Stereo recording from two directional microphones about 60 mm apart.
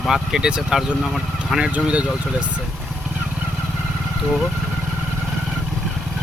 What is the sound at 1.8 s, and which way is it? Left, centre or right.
Speech, centre.